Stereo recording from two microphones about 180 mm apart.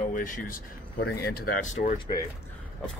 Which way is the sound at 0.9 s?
60° left (ahead or behind).